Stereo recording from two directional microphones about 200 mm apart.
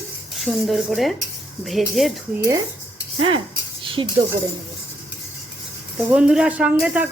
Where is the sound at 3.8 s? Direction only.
25° right (ahead or behind).